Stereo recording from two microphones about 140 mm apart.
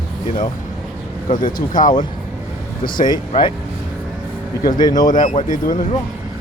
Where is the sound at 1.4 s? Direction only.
70° left (ahead or behind).